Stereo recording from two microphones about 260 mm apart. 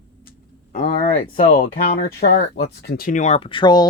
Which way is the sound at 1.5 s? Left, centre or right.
Left.